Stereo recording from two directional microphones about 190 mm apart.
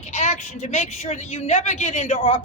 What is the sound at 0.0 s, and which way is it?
A woman's voice, 35° left (ahead or behind).